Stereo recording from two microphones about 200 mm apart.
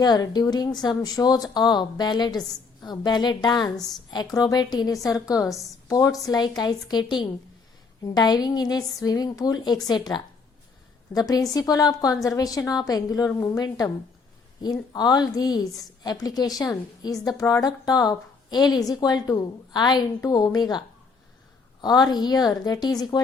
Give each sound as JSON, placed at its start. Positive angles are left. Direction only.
{"t": 0.0, "sound": "a woman's voice", "side_deg": 20}